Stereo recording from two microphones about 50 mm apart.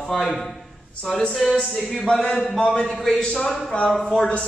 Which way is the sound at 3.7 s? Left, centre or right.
Centre.